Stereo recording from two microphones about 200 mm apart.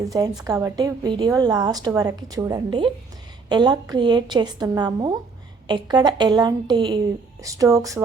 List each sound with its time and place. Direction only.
0.4 s a woman's voice: 15° right (ahead or behind)